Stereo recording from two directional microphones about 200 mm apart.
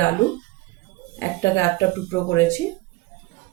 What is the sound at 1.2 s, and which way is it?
Speech, 10° left (ahead or behind).